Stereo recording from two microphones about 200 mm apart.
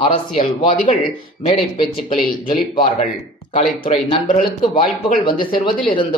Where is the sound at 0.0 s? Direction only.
30° left (ahead or behind).